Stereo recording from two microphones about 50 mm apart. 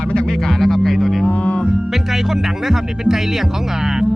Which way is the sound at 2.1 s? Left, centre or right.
Centre.